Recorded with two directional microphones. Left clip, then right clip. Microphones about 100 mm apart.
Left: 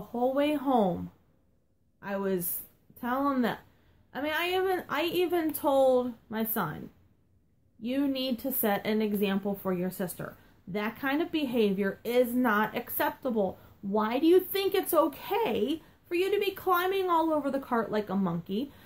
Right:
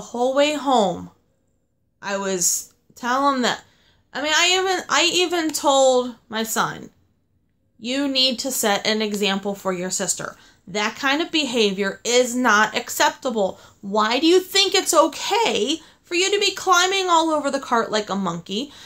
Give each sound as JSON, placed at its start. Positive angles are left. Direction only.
{"t": 0.1, "sound": "speech", "side_deg": -25}
{"t": 2.0, "sound": "speech", "side_deg": -25}
{"t": 7.8, "sound": "speech", "side_deg": -25}